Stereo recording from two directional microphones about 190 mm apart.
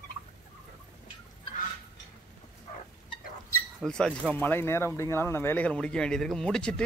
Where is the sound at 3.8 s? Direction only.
Centre (ahead or behind).